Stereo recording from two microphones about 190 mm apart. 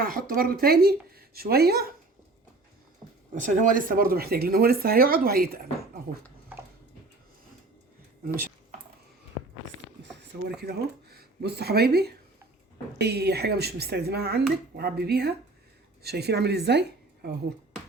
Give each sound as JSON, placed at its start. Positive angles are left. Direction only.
{"t": 0.0, "sound": "speech", "side_deg": -50}
{"t": 3.4, "sound": "speech", "side_deg": -45}
{"t": 10.6, "sound": "speech", "side_deg": -55}